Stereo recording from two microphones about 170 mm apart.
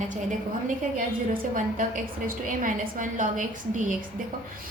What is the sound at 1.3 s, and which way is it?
A woman's voice, 50° right (ahead or behind).